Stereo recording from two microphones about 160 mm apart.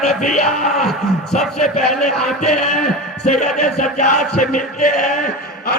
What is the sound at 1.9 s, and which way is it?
Music, centre (ahead or behind).